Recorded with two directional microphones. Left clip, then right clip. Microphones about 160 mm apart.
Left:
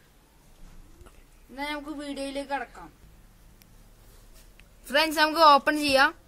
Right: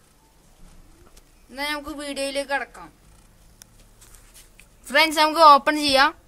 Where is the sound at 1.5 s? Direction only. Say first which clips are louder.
Right 5 dB; 35° right (ahead or behind).